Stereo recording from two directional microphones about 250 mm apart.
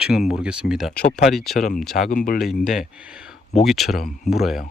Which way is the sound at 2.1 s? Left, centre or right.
Left.